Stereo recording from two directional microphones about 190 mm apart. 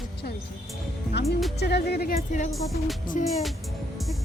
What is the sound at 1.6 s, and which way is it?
Speech, 60° left (ahead or behind).